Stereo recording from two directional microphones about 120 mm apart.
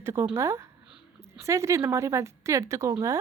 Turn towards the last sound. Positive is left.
turn(degrees=-25)  # may be behind; listen again after turning